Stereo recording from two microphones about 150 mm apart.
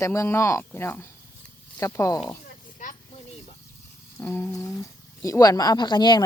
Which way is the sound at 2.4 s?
60° left (ahead or behind).